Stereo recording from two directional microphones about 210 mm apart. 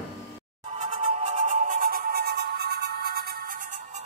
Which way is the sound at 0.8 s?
25° right (ahead or behind).